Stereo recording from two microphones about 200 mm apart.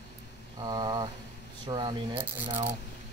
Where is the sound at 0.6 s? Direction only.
20° right (ahead or behind).